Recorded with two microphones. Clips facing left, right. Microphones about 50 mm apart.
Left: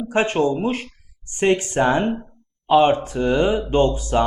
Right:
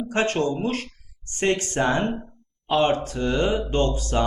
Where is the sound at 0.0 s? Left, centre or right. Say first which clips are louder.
Left 4 dB; centre.